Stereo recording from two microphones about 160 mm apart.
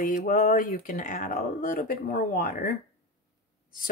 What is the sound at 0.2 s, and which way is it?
Speech, 60° left (ahead or behind).